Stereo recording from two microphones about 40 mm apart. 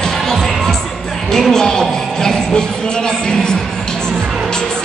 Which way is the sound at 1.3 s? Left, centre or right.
Centre.